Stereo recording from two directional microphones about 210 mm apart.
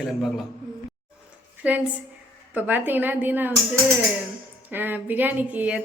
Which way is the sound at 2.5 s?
10° right (ahead or behind).